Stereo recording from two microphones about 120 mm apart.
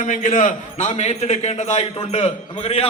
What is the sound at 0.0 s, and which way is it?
A man's voice, 90° left.